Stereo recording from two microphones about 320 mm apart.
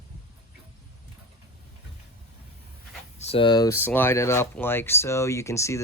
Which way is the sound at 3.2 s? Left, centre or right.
Centre.